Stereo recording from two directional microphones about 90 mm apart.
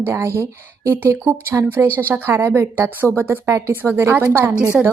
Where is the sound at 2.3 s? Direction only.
30° right (ahead or behind).